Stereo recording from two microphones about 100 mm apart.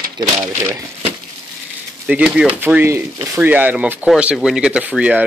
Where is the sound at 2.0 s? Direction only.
10° right (ahead or behind).